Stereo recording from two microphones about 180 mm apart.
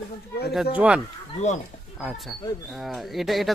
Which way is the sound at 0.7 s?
10° right (ahead or behind).